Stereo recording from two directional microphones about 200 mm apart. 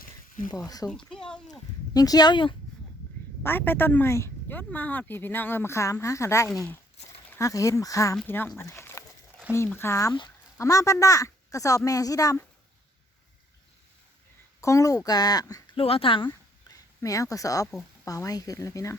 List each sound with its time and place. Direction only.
0.9 s speech: 5° left (ahead or behind)
1.5 s speech: 20° left (ahead or behind)
3.4 s speech: 10° left (ahead or behind)
6.5 s speech: centre (ahead or behind)
7.3 s speech: 15° left (ahead or behind)
14.6 s speech: 15° left (ahead or behind)
16.2 s a sound: 15° left (ahead or behind)
18.0 s speech: 15° left (ahead or behind)